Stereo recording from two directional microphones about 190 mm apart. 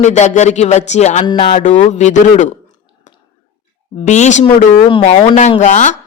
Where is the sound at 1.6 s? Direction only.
40° left (ahead or behind).